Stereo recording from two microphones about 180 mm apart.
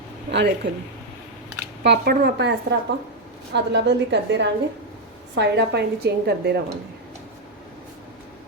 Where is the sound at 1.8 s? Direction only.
60° right (ahead or behind).